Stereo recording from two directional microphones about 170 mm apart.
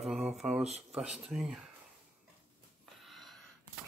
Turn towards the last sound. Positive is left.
turn(degrees=0)  # may be behind; listen again after turning